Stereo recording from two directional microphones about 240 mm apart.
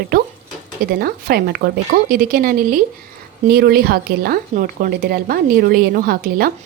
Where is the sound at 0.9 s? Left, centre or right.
Right.